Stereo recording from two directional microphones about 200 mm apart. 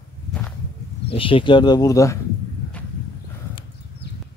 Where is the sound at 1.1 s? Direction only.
25° left (ahead or behind).